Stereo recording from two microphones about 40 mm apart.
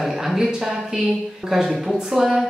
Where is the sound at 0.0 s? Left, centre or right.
Centre.